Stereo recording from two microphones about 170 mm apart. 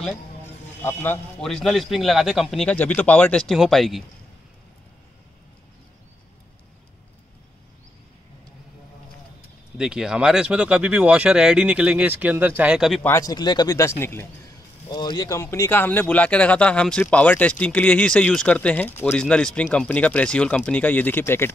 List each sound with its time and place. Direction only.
0.8 s speech: 10° left (ahead or behind)
9.8 s speech: 5° right (ahead or behind)
13.0 s speech: 20° left (ahead or behind)
14.9 s speech: 25° left (ahead or behind)